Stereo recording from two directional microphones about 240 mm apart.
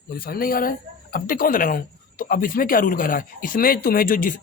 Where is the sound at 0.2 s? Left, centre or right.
Left.